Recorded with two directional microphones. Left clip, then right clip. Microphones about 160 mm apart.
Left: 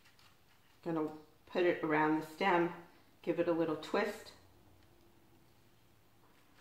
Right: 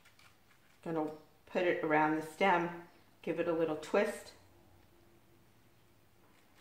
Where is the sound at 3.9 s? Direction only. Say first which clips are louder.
Right 4 dB; 20° right (ahead or behind).